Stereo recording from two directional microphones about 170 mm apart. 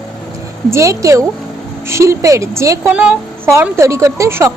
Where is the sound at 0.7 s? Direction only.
15° right (ahead or behind).